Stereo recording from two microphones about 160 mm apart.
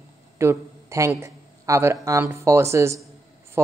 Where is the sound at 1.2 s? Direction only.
20° right (ahead or behind).